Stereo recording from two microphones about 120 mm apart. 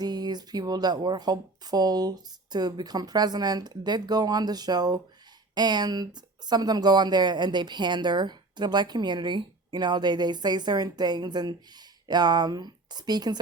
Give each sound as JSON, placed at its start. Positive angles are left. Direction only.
{"t": 0.0, "sound": "speech", "side_deg": -35}